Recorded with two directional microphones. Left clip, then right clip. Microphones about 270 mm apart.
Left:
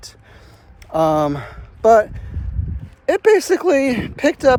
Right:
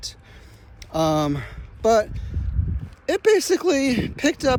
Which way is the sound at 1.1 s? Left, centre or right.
Centre.